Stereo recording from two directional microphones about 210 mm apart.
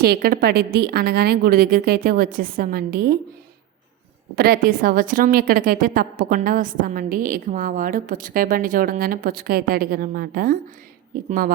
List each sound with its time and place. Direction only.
0.0 s a woman's voice: 45° right (ahead or behind)
4.4 s a woman's voice: 45° right (ahead or behind)